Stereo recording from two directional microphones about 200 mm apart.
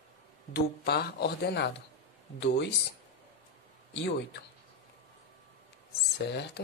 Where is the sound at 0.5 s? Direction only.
50° left (ahead or behind).